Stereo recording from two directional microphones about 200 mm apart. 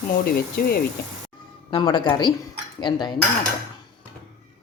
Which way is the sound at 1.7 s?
20° left (ahead or behind).